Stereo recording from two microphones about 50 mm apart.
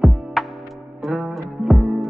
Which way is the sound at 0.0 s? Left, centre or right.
Centre.